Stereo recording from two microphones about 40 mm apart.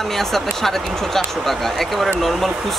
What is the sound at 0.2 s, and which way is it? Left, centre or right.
Speech, centre.